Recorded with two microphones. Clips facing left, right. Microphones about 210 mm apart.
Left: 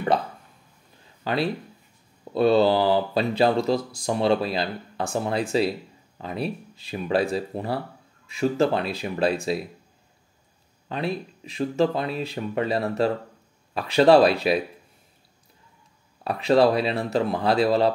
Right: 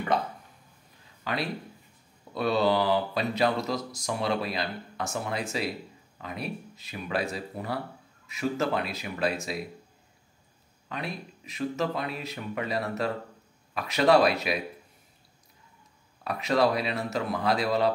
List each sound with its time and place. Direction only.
1.2 s speech: 30° left (ahead or behind)
10.9 s speech: 30° left (ahead or behind)
16.3 s speech: 30° left (ahead or behind)